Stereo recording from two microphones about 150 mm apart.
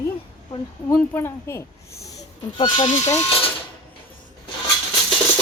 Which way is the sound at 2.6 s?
30° left (ahead or behind).